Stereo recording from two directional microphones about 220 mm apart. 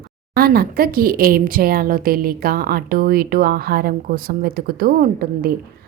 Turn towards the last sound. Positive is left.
turn(degrees=-40)  # may be behind; listen again after turning